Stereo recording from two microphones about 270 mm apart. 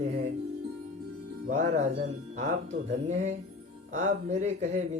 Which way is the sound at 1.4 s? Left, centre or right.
Right.